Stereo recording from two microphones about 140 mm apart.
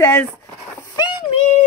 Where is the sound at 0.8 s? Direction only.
30° left (ahead or behind).